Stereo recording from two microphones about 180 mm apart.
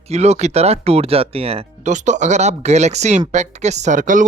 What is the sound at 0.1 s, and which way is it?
Speech, 35° right (ahead or behind).